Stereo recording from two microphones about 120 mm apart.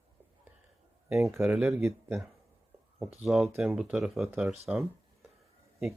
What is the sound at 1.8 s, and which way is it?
Speech, 20° right (ahead or behind).